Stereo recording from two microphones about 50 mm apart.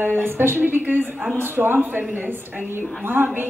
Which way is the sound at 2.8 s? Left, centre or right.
Right.